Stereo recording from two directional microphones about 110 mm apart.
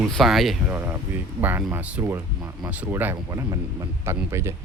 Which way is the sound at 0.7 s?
15° right (ahead or behind).